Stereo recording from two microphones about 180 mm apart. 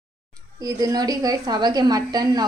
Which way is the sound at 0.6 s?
20° right (ahead or behind).